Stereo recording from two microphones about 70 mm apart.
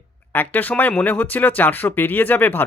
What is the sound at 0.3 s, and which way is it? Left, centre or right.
Speech, left.